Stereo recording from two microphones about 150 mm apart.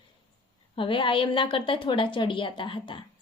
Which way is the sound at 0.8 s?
35° left (ahead or behind).